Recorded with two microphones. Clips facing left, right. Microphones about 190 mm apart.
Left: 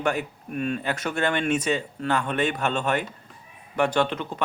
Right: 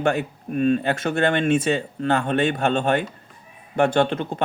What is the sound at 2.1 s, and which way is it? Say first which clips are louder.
Speech: right 4 dB; 40° right (ahead or behind).